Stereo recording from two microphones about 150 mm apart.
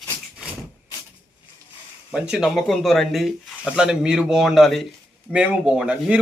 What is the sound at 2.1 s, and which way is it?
A man's voice, 5° right (ahead or behind).